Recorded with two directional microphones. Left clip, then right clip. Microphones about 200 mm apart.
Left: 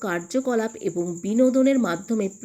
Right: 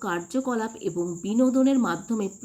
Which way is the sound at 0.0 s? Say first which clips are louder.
Left 3 dB; 15° left (ahead or behind).